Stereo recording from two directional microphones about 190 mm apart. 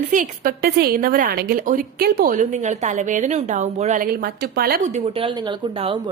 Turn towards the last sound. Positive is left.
turn(degrees=-30)  # may be behind; listen again after turning